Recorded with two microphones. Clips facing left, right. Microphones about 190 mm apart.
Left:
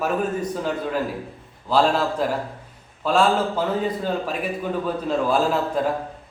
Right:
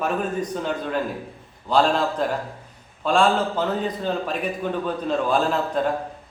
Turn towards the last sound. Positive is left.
turn(degrees=5)  # may be behind; listen again after turning